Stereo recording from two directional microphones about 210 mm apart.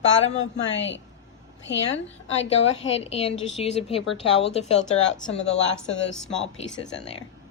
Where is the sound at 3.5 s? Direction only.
30° left (ahead or behind).